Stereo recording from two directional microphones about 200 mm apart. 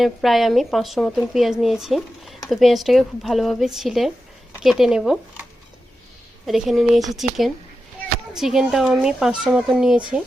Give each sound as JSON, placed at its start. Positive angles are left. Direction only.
{"t": 0.0, "sound": "speech", "side_deg": 0}